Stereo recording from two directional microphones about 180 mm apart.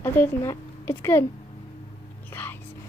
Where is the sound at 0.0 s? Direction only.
15° left (ahead or behind).